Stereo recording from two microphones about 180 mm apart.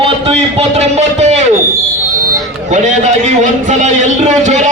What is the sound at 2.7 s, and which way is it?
A man's voice, 40° right (ahead or behind).